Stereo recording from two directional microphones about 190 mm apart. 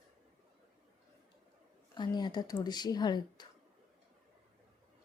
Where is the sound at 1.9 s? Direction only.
20° left (ahead or behind).